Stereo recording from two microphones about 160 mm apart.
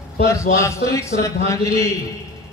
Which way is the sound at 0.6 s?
20° left (ahead or behind).